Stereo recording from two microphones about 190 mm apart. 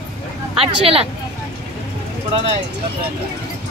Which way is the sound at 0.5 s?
30° right (ahead or behind).